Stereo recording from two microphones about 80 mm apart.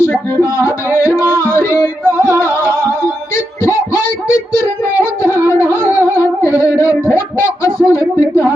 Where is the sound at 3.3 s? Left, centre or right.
Left.